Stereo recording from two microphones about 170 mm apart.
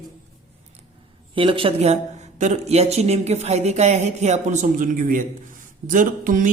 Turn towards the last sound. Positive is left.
turn(degrees=-50)  # may be behind; listen again after turning